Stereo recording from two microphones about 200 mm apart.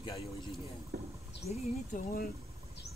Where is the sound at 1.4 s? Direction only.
40° left (ahead or behind).